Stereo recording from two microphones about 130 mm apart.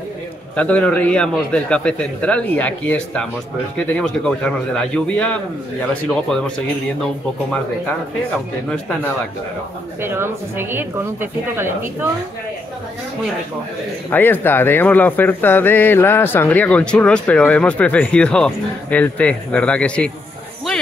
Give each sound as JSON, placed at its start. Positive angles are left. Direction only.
{"t": 0.6, "sound": "speech", "side_deg": 10}
{"t": 10.0, "sound": "a woman's voice", "side_deg": -20}
{"t": 14.1, "sound": "speech", "side_deg": 15}